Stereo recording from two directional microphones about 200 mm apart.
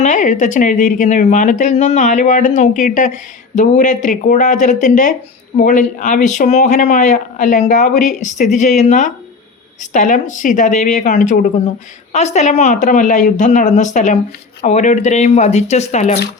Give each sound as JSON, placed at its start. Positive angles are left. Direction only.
{"t": 0.0, "sound": "speech", "side_deg": 40}